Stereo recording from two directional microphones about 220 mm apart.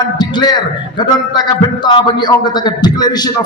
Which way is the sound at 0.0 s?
20° left (ahead or behind).